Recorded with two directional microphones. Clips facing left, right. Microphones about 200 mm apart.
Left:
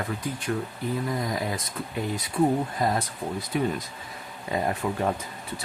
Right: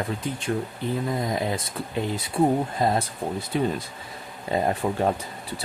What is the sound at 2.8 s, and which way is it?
Speech, 25° right (ahead or behind).